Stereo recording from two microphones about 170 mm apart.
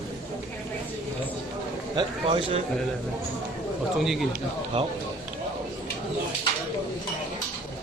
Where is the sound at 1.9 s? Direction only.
30° right (ahead or behind).